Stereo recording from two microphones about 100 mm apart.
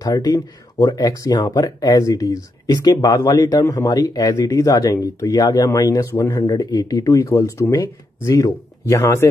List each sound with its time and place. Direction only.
0.0 s speech: 40° left (ahead or behind)